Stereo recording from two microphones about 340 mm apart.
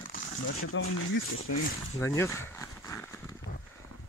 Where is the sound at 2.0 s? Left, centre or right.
Centre.